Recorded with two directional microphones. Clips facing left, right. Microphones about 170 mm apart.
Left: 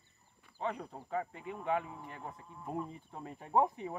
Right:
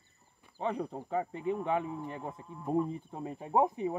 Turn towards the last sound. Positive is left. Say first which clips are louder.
# right 3 dB
turn(degrees=-15)  # may be behind; listen again after turning